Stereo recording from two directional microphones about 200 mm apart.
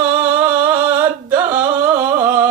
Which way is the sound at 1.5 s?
10° right (ahead or behind).